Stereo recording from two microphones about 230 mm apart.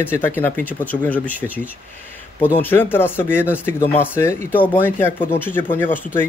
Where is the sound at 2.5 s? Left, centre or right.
Centre.